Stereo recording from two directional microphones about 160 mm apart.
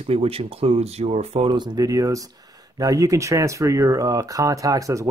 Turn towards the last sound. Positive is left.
turn(degrees=-20)  # may be behind; listen again after turning